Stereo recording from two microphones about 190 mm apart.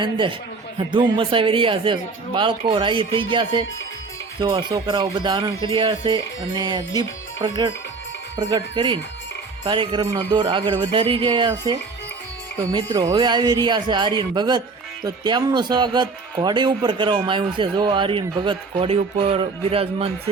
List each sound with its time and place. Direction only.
0.0 s speech: 25° right (ahead or behind)